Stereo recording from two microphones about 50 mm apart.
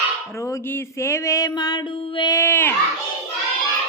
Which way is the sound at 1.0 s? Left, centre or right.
Left.